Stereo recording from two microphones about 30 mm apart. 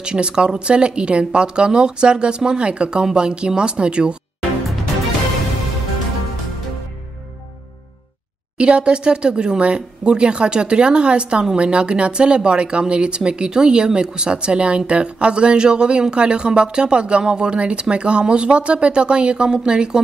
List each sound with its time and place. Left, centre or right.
0.0 s speech: right
8.5 s speech: right